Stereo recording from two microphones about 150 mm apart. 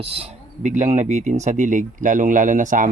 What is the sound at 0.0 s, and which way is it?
Speech, 40° right (ahead or behind).